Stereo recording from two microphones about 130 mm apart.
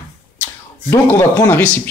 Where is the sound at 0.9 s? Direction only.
20° left (ahead or behind).